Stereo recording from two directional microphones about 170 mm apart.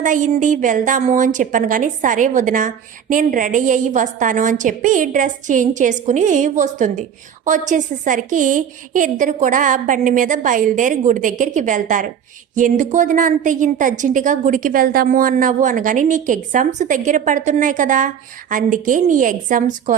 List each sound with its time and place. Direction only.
0.0 s a woman's voice: 50° right (ahead or behind)